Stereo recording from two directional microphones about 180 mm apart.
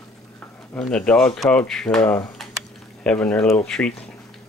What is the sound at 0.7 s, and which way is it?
Speech, 5° left (ahead or behind).